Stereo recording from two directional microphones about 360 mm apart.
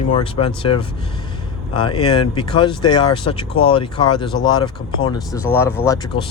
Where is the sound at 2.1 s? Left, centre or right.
Centre.